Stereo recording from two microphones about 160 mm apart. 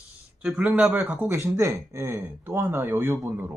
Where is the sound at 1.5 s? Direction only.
20° right (ahead or behind).